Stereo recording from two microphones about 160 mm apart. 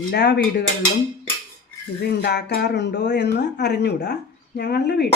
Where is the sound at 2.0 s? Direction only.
90° left.